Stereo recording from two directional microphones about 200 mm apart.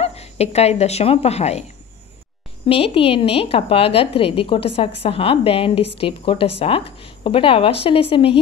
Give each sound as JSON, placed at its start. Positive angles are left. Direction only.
{"t": 0.0, "sound": "speech", "side_deg": 30}
{"t": 2.7, "sound": "a woman's voice", "side_deg": 30}